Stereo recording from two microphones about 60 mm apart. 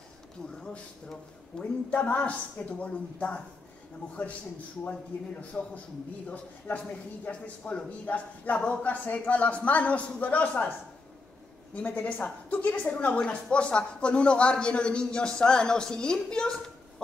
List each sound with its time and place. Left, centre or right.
1.6 s a man's voice: left
11.7 s speech: left